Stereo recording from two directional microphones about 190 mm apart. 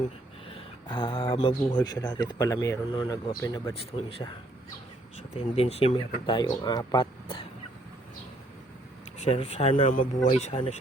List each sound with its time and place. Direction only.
0.4 s speech: 30° left (ahead or behind)
6.2 s speech: 25° left (ahead or behind)
9.1 s speech: 35° left (ahead or behind)